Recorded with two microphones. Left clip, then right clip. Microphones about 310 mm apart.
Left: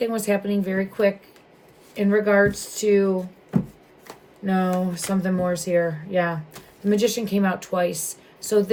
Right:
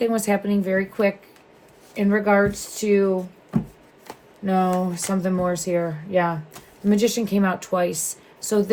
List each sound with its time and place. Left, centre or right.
0.0 s a woman's voice: centre
4.0 s chopping: centre
5.0 s a woman's voice: centre